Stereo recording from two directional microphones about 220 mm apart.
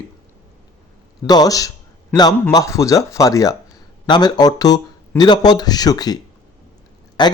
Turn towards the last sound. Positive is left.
turn(degrees=20)  # may be behind; listen again after turning